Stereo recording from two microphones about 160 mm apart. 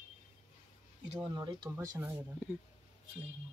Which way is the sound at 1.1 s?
30° right (ahead or behind).